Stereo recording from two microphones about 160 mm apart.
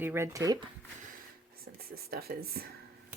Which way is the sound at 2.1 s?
75° right (ahead or behind).